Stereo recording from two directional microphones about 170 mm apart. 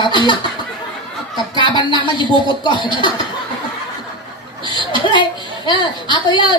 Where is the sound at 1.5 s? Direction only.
30° left (ahead or behind).